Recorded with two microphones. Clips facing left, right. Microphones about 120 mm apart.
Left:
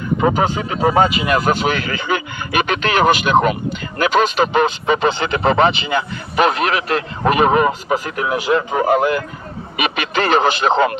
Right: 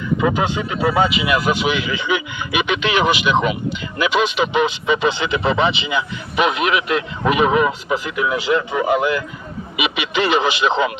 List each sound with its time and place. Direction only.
0.2 s speech: 40° left (ahead or behind)